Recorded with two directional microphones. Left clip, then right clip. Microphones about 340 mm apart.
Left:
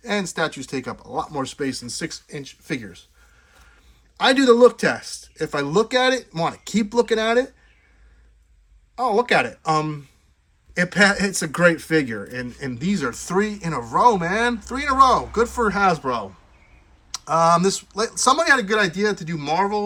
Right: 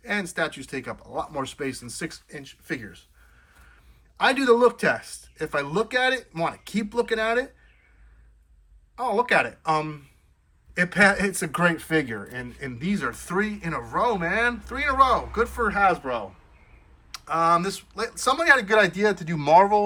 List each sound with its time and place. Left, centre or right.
0.0 s speech: centre
4.2 s speech: centre
9.0 s speech: centre